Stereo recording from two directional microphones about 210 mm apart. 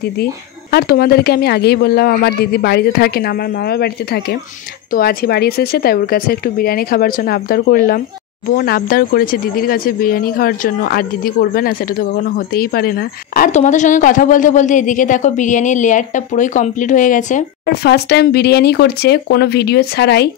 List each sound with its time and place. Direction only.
0.2 s speech: 50° left (ahead or behind)
17.6 s speech: 50° left (ahead or behind)